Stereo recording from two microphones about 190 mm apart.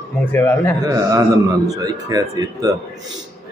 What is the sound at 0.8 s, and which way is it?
A man's voice, 20° right (ahead or behind).